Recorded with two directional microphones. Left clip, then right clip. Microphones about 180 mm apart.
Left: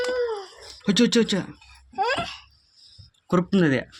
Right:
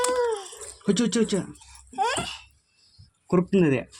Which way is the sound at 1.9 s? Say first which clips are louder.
Left 1 dB; 25° left (ahead or behind).